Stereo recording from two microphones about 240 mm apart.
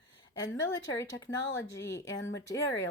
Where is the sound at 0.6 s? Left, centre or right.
Centre.